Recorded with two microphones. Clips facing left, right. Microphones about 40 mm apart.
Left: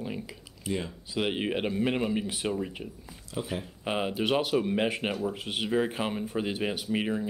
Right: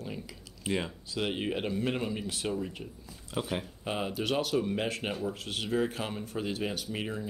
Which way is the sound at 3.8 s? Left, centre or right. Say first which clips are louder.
Left 5 dB; left.